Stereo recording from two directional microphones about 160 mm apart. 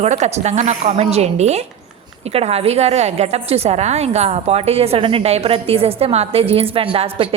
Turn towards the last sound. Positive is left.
turn(degrees=-35)  # may be behind; listen again after turning